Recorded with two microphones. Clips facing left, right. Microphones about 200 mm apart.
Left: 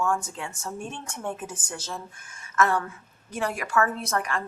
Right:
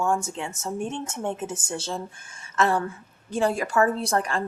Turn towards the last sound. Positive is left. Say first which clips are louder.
# right 3 dB
turn(degrees=-30)  # may be behind; listen again after turning